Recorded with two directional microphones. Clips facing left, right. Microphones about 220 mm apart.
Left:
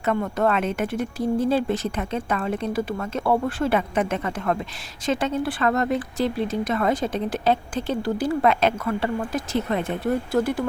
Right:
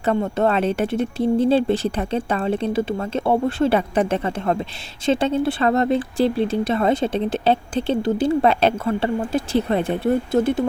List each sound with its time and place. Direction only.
0.0 s speech: 30° right (ahead or behind)